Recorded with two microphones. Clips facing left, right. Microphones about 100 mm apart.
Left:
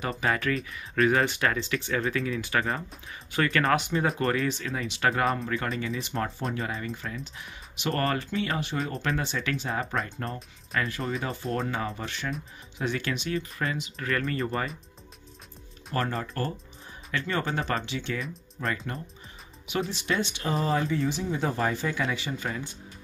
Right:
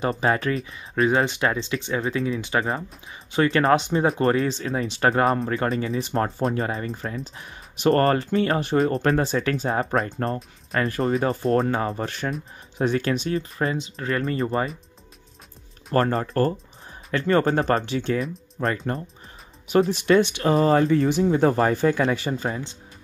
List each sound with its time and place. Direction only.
0.0 s speech: 30° right (ahead or behind)
15.9 s speech: 45° right (ahead or behind)
22.4 s speech: 25° right (ahead or behind)